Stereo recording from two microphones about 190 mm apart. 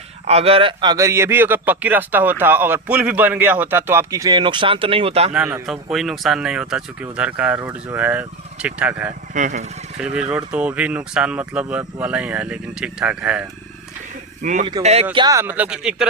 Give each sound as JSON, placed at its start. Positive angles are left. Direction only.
{"t": 0.3, "sound": "a man's voice", "side_deg": -30}
{"t": 5.3, "sound": "a man's voice", "side_deg": -10}
{"t": 9.3, "sound": "speech", "side_deg": -40}
{"t": 10.2, "sound": "a man's voice", "side_deg": -5}
{"t": 14.4, "sound": "speech", "side_deg": -40}
{"t": 15.1, "sound": "a man's voice", "side_deg": -20}